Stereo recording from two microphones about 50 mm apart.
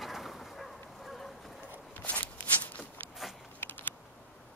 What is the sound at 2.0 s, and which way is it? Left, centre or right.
Shuffling cards, left.